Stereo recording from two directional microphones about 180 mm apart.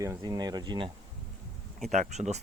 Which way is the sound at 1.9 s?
40° right (ahead or behind).